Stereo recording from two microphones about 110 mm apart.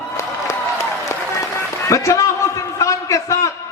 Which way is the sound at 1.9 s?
30° left (ahead or behind).